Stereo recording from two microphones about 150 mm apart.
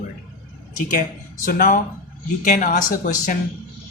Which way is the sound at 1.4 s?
65° left (ahead or behind).